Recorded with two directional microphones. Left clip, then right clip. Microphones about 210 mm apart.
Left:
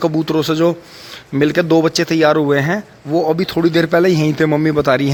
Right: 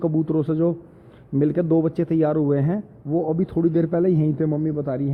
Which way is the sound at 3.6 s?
35° left (ahead or behind).